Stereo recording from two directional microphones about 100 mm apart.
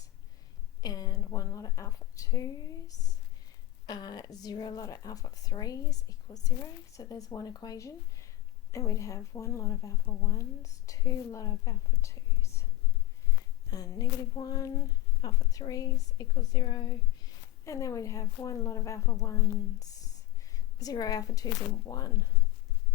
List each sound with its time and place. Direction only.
0.8 s a woman's voice: 40° left (ahead or behind)
13.7 s a woman's voice: 40° left (ahead or behind)
17.7 s a woman's voice: 30° left (ahead or behind)
20.7 s a woman's voice: 40° left (ahead or behind)